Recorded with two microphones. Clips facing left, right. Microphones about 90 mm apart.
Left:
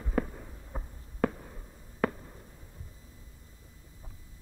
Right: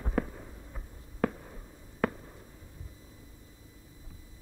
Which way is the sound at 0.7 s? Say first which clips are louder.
Left 10 dB; 35° left (ahead or behind).